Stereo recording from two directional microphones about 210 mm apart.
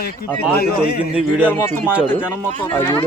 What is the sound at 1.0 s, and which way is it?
Speech, 5° right (ahead or behind).